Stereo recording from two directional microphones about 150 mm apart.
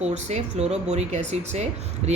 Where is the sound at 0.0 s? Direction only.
45° right (ahead or behind).